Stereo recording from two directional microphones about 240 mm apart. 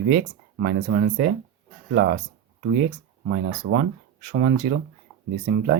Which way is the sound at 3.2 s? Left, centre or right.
Right.